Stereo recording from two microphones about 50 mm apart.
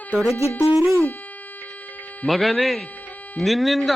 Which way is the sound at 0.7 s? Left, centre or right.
Right.